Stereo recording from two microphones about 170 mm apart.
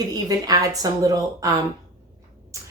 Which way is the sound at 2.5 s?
20° right (ahead or behind).